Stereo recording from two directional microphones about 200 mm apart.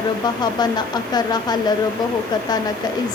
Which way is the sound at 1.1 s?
20° left (ahead or behind).